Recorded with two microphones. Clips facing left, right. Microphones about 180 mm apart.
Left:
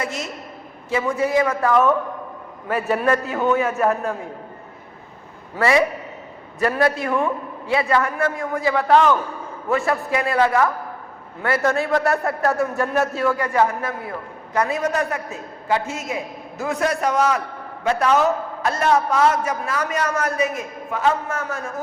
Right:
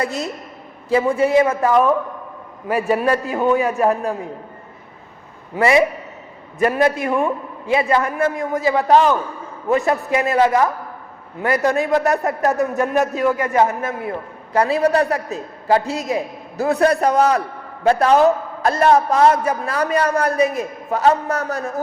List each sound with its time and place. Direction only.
0.9 s a man's voice: 30° right (ahead or behind); by 3.9 s 15° right (ahead or behind)
5.5 s a man's voice: 20° right (ahead or behind); by 21.7 s 40° right (ahead or behind)